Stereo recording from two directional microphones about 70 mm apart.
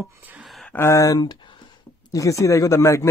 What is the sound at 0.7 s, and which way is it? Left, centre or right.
Speech, left.